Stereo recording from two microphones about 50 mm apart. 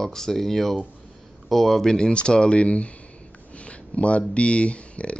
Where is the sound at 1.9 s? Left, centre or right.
Centre.